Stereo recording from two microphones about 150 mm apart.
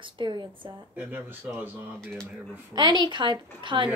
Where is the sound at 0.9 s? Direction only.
15° right (ahead or behind).